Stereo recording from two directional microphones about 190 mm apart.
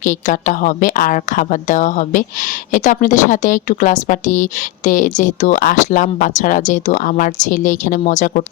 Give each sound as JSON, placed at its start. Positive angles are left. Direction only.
{"t": 0.0, "sound": "a woman's voice", "side_deg": 40}